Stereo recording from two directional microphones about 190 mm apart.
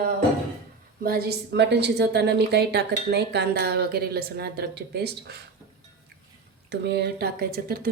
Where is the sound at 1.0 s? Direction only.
55° right (ahead or behind).